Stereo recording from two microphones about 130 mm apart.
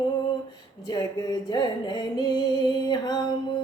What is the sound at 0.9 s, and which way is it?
Music, 30° left (ahead or behind).